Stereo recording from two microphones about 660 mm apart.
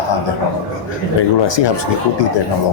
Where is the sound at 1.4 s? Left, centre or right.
Left.